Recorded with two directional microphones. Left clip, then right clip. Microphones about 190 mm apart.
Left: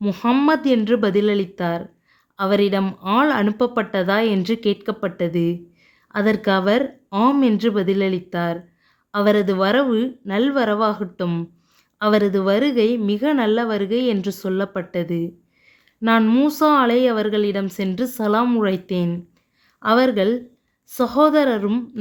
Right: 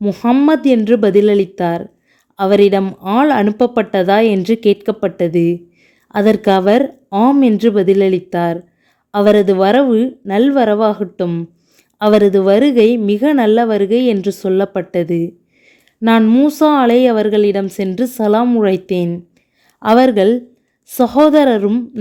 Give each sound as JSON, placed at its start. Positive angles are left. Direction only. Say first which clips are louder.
{"t": 0.0, "sound": "a woman's voice", "louder": "right 5 dB", "side_deg": -20}